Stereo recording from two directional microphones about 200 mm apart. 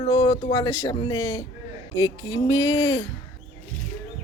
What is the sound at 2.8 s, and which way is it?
Speech, 75° left (ahead or behind).